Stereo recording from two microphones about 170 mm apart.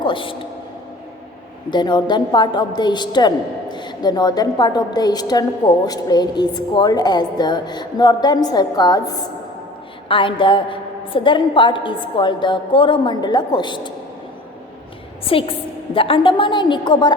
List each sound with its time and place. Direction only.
0.0 s a woman's voice: 30° left (ahead or behind)
1.7 s a woman's voice: 25° left (ahead or behind)
15.2 s a woman's voice: 35° left (ahead or behind)